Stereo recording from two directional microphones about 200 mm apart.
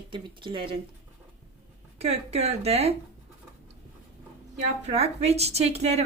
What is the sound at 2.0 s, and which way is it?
Speech, 30° right (ahead or behind).